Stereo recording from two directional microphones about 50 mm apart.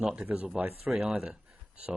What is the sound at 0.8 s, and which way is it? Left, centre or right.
Speech, centre.